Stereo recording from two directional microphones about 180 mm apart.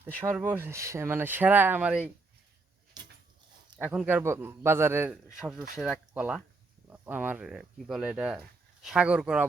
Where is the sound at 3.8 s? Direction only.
10° right (ahead or behind).